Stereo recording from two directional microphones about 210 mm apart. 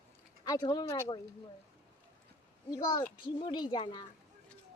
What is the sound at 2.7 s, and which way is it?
A child's voice, 20° left (ahead or behind).